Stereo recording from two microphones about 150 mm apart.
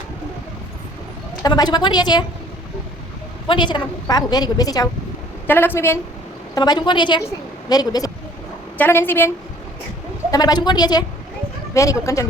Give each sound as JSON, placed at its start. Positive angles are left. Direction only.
{"t": 1.4, "sound": "a woman's voice", "side_deg": 25}
{"t": 3.4, "sound": "a woman's voice", "side_deg": 30}
{"t": 5.5, "sound": "a woman's voice", "side_deg": 15}
{"t": 6.5, "sound": "a woman's voice", "side_deg": 30}
{"t": 8.8, "sound": "a woman's voice", "side_deg": 15}
{"t": 10.3, "sound": "a woman's voice", "side_deg": 25}